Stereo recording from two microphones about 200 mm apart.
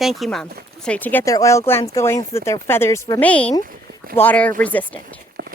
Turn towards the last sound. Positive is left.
turn(degrees=-50)  # may be behind; listen again after turning